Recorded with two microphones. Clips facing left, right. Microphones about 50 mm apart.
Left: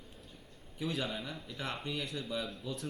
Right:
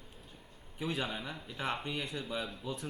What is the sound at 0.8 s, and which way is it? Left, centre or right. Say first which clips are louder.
A man's voice: even; centre.